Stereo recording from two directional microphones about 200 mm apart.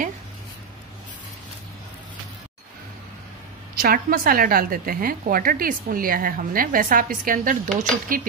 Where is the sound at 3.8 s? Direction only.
45° right (ahead or behind).